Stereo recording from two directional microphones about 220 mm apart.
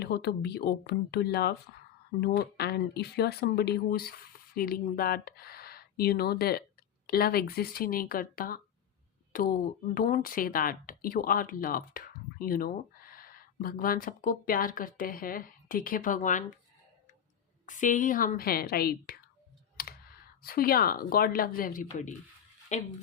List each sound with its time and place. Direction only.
0.0 s speech: 45° left (ahead or behind)
17.7 s speech: 35° left (ahead or behind)